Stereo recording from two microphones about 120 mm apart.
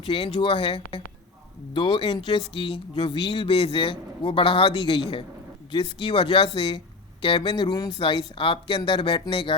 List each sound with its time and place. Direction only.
0.0 s speech: 50° left (ahead or behind)